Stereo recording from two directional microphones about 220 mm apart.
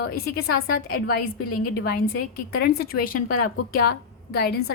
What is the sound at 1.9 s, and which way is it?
A woman's voice, 45° left (ahead or behind).